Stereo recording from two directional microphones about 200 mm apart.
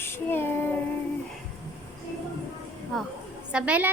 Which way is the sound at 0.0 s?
10° left (ahead or behind).